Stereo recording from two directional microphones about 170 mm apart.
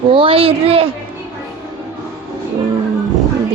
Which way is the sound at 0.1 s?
30° right (ahead or behind).